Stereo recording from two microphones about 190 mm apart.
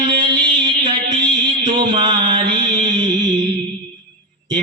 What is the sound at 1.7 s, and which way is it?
Mantra, 25° right (ahead or behind).